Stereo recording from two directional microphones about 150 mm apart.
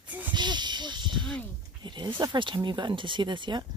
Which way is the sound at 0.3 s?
30° right (ahead or behind).